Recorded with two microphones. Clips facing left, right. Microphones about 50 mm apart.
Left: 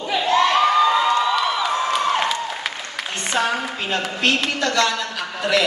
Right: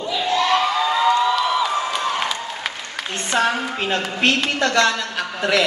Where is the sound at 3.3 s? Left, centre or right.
Right.